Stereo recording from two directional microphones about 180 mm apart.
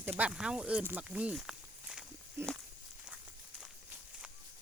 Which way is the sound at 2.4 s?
15° right (ahead or behind).